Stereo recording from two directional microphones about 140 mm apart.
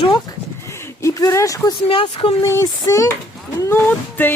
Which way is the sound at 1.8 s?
40° left (ahead or behind).